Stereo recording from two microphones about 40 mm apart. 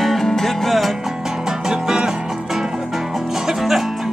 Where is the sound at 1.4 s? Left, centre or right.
Centre.